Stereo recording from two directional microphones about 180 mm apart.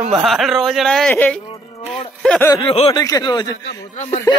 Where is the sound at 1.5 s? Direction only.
30° left (ahead or behind).